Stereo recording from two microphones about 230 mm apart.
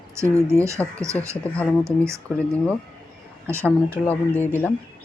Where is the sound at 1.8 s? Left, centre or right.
Centre.